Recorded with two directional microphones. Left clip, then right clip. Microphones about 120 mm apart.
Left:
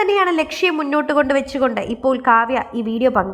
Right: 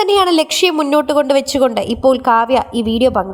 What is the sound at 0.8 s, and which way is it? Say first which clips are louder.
Speech: right 4 dB; 35° right (ahead or behind).